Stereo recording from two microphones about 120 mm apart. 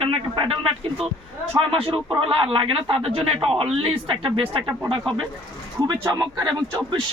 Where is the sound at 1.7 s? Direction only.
50° right (ahead or behind).